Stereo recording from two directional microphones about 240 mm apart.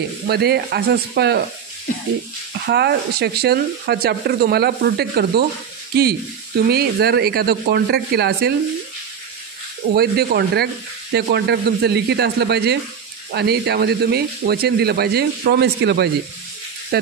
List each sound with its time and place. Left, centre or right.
0.3 s speech: right
2.6 s speech: right
6.7 s speech: right
9.9 s speech: right